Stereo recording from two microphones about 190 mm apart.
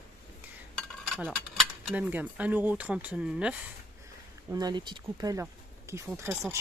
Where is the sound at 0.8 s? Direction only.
Centre (ahead or behind).